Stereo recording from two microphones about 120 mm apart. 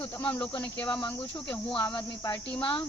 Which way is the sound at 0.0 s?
15° left (ahead or behind).